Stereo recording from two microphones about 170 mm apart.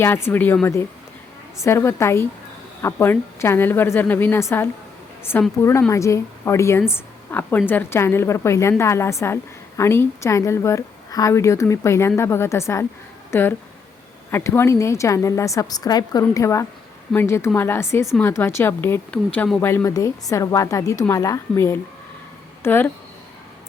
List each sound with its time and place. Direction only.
0.0 s a woman's voice: 15° left (ahead or behind)